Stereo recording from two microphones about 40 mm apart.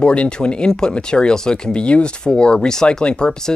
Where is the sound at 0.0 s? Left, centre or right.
Left.